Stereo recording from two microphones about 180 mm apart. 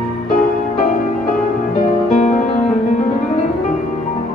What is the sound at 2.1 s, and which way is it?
Music, 45° left (ahead or behind).